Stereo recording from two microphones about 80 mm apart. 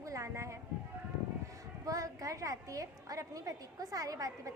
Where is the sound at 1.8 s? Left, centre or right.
Right.